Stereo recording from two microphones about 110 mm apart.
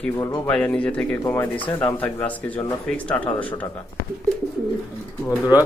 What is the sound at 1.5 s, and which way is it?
Speech, 50° left (ahead or behind).